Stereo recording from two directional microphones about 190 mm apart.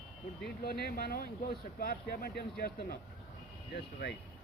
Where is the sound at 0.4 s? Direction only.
55° left (ahead or behind).